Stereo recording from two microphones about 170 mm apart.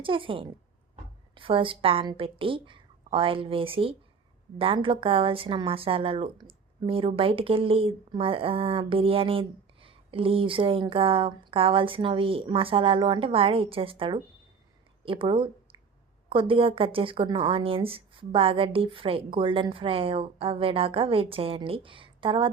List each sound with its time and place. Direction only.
0.0 s speech: 30° right (ahead or behind)